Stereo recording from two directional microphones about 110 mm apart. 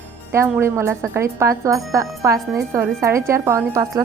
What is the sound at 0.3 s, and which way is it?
A woman's voice, 25° right (ahead or behind).